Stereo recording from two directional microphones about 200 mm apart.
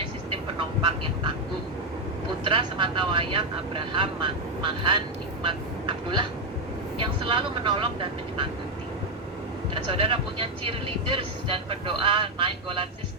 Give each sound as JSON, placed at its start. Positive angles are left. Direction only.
{"t": 2.4, "sound": "speech", "side_deg": -25}
{"t": 9.7, "sound": "speech", "side_deg": -25}